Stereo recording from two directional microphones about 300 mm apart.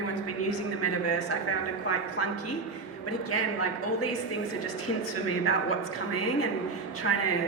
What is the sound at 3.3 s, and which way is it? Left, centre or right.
Speech, left.